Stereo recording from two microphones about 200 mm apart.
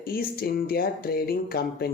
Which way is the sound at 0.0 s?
45° left (ahead or behind).